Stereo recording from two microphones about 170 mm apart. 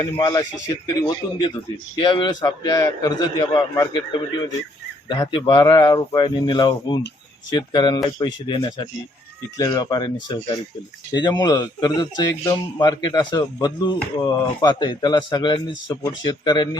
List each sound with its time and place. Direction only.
0.0 s a man's voice: 20° left (ahead or behind)